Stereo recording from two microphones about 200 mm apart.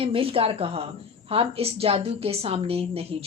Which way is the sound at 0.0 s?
30° right (ahead or behind).